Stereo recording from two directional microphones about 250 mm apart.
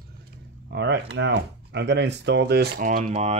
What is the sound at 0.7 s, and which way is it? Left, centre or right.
Speech, right.